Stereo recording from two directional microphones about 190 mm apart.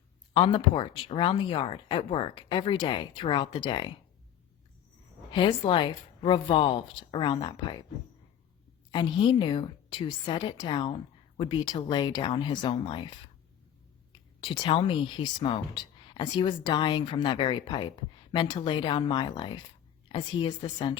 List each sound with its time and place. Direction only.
0.3 s a woman's voice: 25° left (ahead or behind)
5.3 s a woman's voice: 25° left (ahead or behind)
8.9 s a woman's voice: 25° left (ahead or behind)
14.1 s a woman's voice: 25° left (ahead or behind)